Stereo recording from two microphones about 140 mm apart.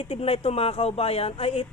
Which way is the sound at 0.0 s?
45° left (ahead or behind).